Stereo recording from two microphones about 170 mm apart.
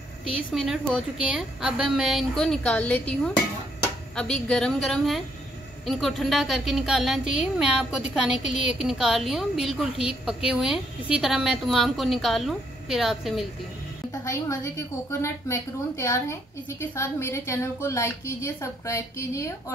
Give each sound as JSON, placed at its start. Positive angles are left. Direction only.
{"t": 0.6, "sound": "a woman's voice", "side_deg": -5}
{"t": 14.2, "sound": "a woman's voice", "side_deg": 20}